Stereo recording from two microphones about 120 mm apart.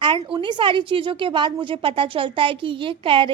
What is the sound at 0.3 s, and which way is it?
A woman's voice, 40° right (ahead or behind).